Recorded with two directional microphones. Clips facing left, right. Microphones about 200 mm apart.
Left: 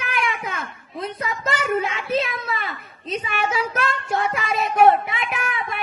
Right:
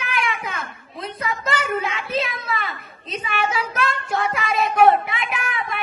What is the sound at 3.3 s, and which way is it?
Speech, 45° left (ahead or behind).